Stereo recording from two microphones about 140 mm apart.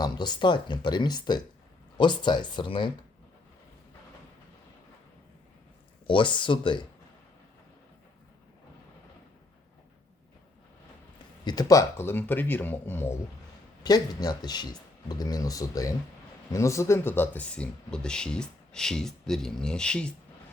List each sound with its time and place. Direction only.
0.0 s speech: 30° left (ahead or behind)
6.1 s speech: 35° left (ahead or behind)
11.4 s speech: 25° left (ahead or behind)
13.8 s speech: 30° left (ahead or behind); by 20.1 s 5° left (ahead or behind)